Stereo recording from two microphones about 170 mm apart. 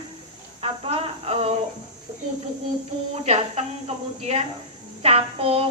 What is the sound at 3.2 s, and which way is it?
A woman's voice, 40° right (ahead or behind).